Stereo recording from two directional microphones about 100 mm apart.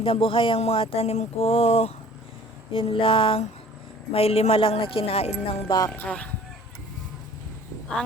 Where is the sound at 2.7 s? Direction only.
65° left (ahead or behind).